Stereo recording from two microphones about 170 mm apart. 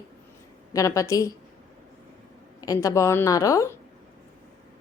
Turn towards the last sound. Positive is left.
turn(degrees=20)  # may be behind; listen again after turning